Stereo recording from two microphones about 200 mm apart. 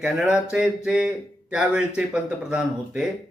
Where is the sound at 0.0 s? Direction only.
5° right (ahead or behind).